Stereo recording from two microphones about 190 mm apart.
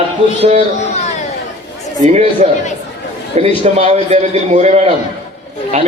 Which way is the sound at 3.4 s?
35° right (ahead or behind).